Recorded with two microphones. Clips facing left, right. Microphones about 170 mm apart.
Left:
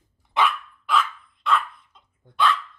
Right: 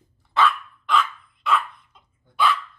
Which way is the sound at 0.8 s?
Centre (ahead or behind).